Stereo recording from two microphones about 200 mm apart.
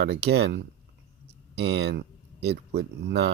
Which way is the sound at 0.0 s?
55° right (ahead or behind).